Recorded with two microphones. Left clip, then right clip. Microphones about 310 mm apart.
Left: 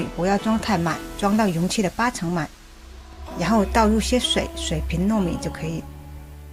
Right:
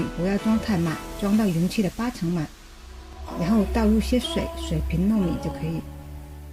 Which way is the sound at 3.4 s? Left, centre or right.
Left.